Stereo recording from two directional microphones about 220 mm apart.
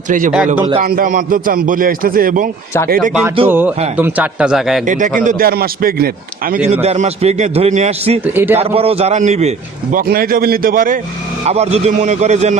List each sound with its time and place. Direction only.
0.8 s a man's voice: 40° right (ahead or behind)
3.1 s a man's voice: 5° right (ahead or behind)
4.9 s a man's voice: 35° right (ahead or behind)
6.8 s a man's voice: 30° right (ahead or behind)
8.2 s a man's voice: 10° right (ahead or behind)
8.5 s a man's voice: 25° right (ahead or behind)
10.0 s a man's voice: 40° right (ahead or behind)
11.4 s a man's voice: 30° right (ahead or behind)